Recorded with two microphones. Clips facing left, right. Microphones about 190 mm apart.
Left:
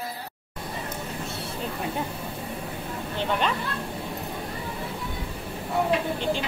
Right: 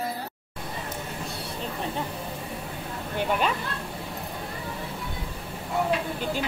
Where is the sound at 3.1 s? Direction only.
5° right (ahead or behind).